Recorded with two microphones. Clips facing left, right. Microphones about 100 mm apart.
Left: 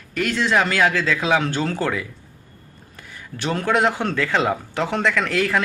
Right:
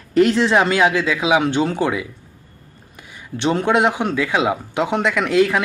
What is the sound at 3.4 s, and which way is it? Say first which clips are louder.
Speech: right 3 dB; 20° right (ahead or behind).